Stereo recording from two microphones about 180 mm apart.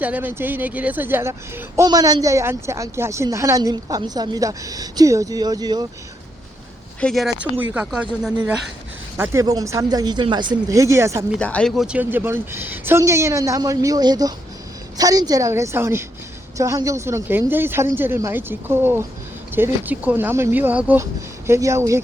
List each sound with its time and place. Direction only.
0.0 s speech: 10° right (ahead or behind)
7.0 s speech: centre (ahead or behind)
9.1 s speech: 15° right (ahead or behind)
11.3 s speech: 5° left (ahead or behind); by 22.0 s 15° right (ahead or behind)